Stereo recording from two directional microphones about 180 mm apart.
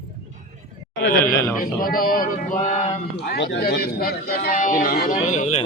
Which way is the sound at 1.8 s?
55° left (ahead or behind).